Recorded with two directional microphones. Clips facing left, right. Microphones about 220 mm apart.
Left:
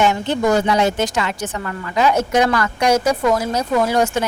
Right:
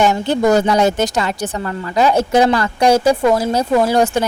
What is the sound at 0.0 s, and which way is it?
Speech, 35° right (ahead or behind).